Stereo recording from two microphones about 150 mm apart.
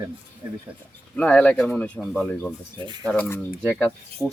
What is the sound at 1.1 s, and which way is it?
Speech, 5° left (ahead or behind).